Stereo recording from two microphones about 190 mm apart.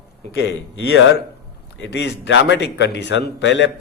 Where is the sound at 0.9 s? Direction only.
80° left.